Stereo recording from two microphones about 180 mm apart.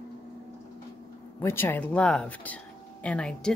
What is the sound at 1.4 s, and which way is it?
Speech, 10° left (ahead or behind).